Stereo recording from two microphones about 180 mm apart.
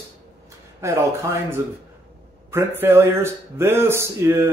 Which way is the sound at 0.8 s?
15° right (ahead or behind).